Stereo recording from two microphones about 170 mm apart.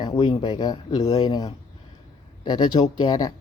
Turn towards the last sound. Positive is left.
turn(degrees=20)  # may be behind; listen again after turning